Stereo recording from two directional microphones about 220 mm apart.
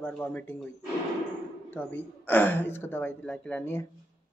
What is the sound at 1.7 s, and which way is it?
Speech, 10° left (ahead or behind).